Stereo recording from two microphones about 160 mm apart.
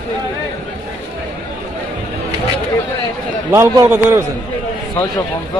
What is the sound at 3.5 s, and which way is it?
Speech, 20° right (ahead or behind).